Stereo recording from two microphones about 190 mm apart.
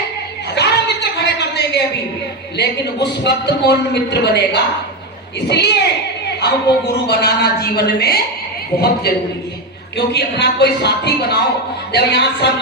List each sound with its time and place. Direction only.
0.5 s a sound: 60° left (ahead or behind)
2.6 s a man's voice: 60° left (ahead or behind)
10.1 s a man's voice: 60° left (ahead or behind)